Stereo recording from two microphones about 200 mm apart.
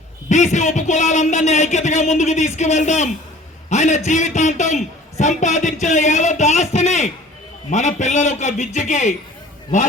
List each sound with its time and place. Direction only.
0.3 s a man's voice: 35° left (ahead or behind)